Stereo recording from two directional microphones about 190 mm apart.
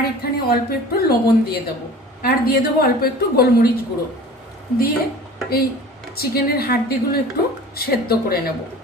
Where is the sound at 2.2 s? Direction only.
50° left (ahead or behind).